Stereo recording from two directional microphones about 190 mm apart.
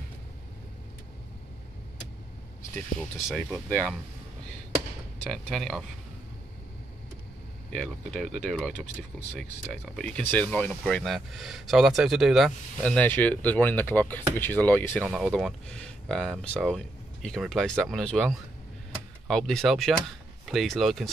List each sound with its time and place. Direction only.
3.0 s speech: centre (ahead or behind)
5.3 s speech: centre (ahead or behind)
7.7 s speech: 5° left (ahead or behind)
15.0 s speech: 5° right (ahead or behind)